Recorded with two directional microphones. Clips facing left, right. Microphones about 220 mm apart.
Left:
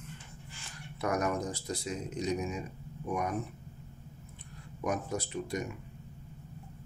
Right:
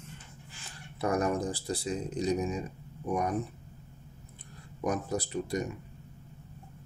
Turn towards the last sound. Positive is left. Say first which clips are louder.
# right 3 dB
turn(degrees=-35)  # may be behind; listen again after turning